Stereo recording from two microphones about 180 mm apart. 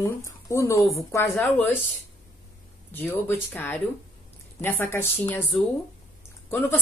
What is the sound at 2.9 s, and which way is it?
A woman's voice, 10° left (ahead or behind).